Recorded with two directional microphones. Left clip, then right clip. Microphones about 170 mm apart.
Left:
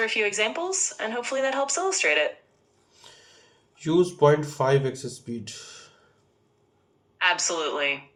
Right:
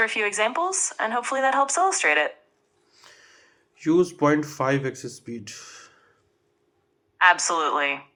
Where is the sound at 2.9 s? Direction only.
45° right (ahead or behind).